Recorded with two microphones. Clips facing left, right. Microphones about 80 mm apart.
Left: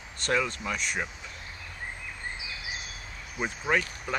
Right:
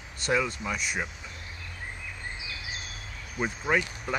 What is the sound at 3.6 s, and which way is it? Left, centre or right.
Speech, centre.